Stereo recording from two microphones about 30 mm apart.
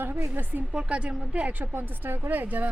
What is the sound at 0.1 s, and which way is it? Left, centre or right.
Speech, right.